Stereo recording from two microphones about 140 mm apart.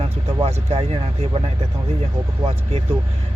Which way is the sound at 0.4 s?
45° right (ahead or behind).